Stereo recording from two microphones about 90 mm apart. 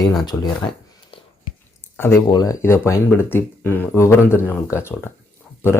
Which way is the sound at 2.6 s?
30° left (ahead or behind).